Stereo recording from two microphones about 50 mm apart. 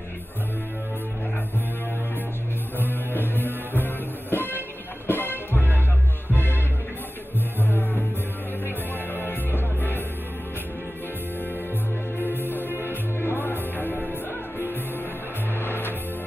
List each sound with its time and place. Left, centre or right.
3.1 s music: left
7.6 s music: left
12.2 s music: left
15.6 s music: left